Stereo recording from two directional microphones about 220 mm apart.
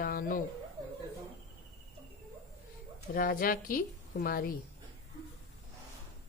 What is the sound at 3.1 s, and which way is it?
Speech, 40° left (ahead or behind).